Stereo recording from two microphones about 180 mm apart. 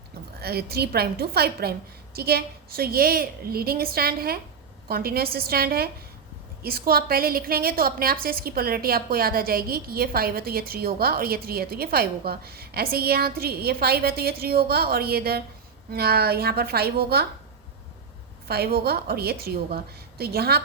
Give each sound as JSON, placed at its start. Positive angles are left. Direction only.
{"t": 0.4, "sound": "a woman's voice", "side_deg": -60}
{"t": 18.4, "sound": "a woman's voice", "side_deg": -60}